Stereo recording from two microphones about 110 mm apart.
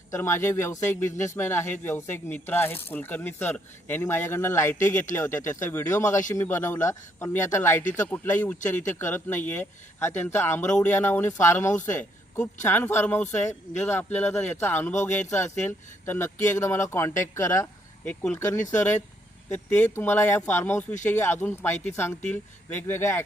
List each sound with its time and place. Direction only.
0.1 s speech: 25° left (ahead or behind)
18.0 s speech: 10° left (ahead or behind)
18.3 s speech: 25° left (ahead or behind)